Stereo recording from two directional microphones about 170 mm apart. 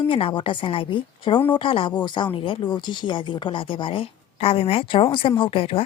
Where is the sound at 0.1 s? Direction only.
30° left (ahead or behind).